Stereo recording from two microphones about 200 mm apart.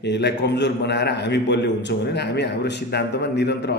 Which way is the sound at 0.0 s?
60° left (ahead or behind).